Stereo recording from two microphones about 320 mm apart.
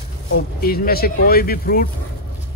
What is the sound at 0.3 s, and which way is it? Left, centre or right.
Speech, left.